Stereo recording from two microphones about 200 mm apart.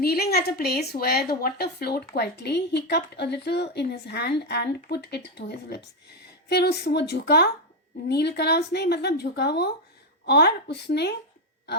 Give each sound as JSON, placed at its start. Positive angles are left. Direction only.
{"t": 0.0, "sound": "a woman's voice", "side_deg": 50}